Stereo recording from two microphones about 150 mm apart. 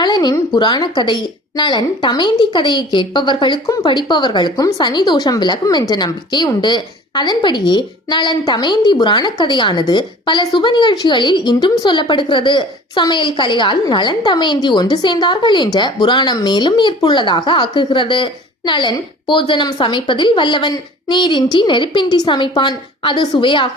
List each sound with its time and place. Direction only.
0.0 s a woman's voice: 30° left (ahead or behind)